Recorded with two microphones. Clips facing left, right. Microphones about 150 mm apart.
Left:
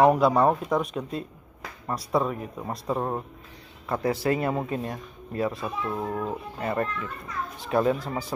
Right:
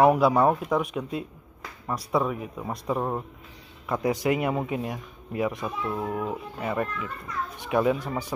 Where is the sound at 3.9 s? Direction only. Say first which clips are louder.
Even; 15° right (ahead or behind).